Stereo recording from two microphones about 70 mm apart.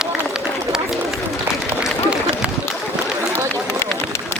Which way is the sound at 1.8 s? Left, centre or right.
Centre.